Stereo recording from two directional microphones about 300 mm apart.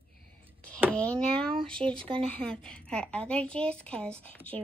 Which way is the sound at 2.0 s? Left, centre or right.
Centre.